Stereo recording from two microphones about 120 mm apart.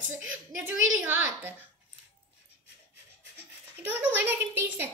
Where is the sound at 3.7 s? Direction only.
15° right (ahead or behind).